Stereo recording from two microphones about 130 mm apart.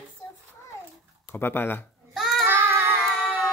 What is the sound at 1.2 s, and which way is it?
Speech, 15° left (ahead or behind).